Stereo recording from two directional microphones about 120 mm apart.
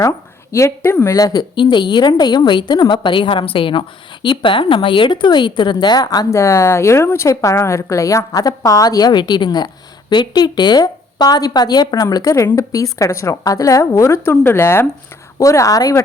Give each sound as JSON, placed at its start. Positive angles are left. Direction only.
{"t": 0.5, "sound": "a woman's voice", "side_deg": 20}